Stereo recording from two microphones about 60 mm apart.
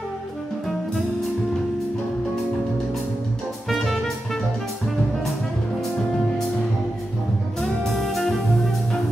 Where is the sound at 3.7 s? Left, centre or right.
Centre.